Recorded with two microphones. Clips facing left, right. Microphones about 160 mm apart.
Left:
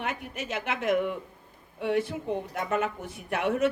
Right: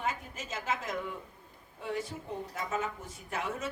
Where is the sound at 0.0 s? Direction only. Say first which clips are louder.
Left 3 dB; 70° left (ahead or behind).